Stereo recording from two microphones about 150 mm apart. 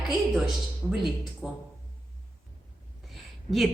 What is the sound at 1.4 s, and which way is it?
Speech, 10° right (ahead or behind).